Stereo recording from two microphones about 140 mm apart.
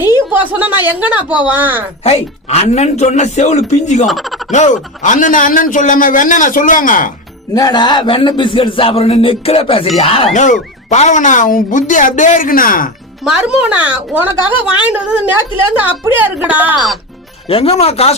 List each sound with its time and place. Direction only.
0.3 s a woman's voice: 10° right (ahead or behind)
2.0 s a man's voice: 45° left (ahead or behind)
4.0 s speech: centre (ahead or behind)
4.5 s a man's voice: 60° left (ahead or behind); by 7.1 s 75° left (ahead or behind)
7.5 s a man's voice: 30° left (ahead or behind)
10.3 s speech: 60° left (ahead or behind); by 12.9 s 80° left
13.2 s a woman's voice: 5° right (ahead or behind)
17.5 s a man's voice: 45° left (ahead or behind)